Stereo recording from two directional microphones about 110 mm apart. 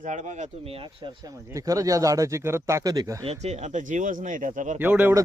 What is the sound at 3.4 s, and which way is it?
Speech, 90° right.